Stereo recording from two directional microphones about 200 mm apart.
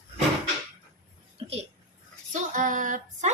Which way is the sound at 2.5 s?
40° right (ahead or behind).